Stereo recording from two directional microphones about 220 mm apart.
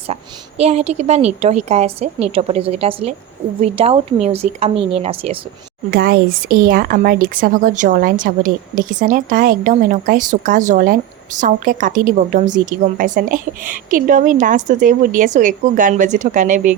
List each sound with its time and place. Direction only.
0.1 s a woman's voice: 30° right (ahead or behind)
5.9 s speech: 40° right (ahead or behind)